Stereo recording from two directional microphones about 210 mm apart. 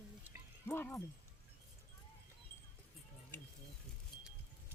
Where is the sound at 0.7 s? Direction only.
10° left (ahead or behind).